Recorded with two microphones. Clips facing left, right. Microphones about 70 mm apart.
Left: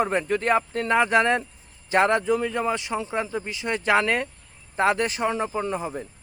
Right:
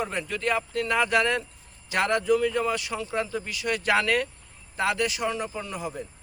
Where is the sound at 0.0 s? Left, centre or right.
Left.